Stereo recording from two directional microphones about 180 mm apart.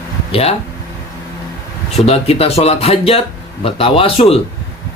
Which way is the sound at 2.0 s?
35° left (ahead or behind).